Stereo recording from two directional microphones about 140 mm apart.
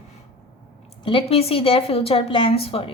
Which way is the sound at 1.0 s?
40° left (ahead or behind).